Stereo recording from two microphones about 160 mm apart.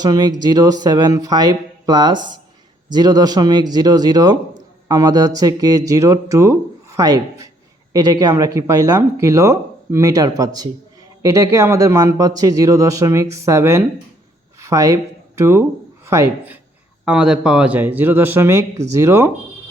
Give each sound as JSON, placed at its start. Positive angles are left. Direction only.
{"t": 0.0, "sound": "speech", "side_deg": -25}
{"t": 17.1, "sound": "speech", "side_deg": -5}